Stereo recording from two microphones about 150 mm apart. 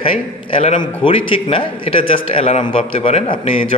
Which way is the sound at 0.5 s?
45° left (ahead or behind).